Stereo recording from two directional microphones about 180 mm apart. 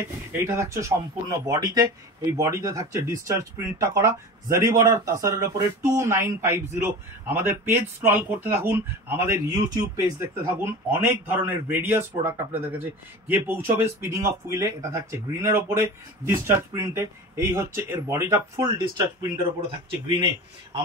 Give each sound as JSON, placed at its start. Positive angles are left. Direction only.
{"t": 0.0, "sound": "speech", "side_deg": -10}